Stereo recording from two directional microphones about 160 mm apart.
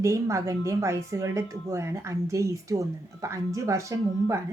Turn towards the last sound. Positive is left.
turn(degrees=-20)  # may be behind; listen again after turning